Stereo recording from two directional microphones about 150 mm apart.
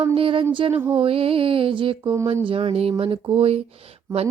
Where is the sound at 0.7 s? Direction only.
15° right (ahead or behind).